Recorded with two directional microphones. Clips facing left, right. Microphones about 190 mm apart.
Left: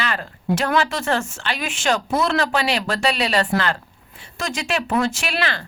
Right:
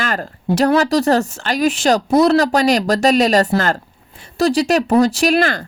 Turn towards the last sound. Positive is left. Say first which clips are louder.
# right 10 dB
turn(degrees=-45)  # may be behind; listen again after turning